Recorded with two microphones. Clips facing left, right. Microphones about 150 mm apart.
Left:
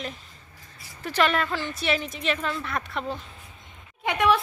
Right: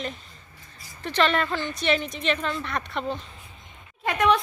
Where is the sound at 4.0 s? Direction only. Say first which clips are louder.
Even; centre (ahead or behind).